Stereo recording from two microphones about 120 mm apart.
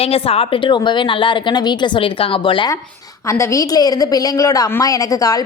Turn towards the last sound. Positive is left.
turn(degrees=30)  # may be behind; listen again after turning